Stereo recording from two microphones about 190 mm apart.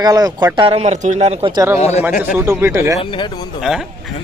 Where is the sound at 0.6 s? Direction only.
30° right (ahead or behind).